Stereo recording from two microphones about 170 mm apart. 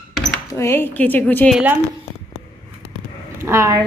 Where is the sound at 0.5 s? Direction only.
15° left (ahead or behind).